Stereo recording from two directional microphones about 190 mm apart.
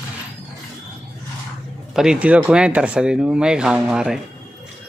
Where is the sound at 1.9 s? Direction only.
5° right (ahead or behind).